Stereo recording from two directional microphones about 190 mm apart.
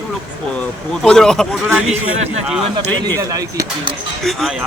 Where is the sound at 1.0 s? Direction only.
5° left (ahead or behind).